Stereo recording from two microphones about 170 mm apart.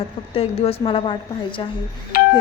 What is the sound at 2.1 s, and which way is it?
Doorbell, 60° left (ahead or behind).